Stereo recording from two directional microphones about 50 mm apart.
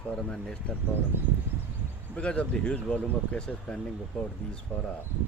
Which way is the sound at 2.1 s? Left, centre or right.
Left.